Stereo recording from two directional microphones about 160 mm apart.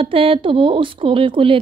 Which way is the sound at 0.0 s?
35° right (ahead or behind).